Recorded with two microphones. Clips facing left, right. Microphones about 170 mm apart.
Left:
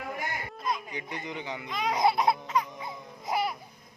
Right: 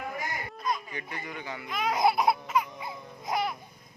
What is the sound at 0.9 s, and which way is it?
Speech, 20° left (ahead or behind).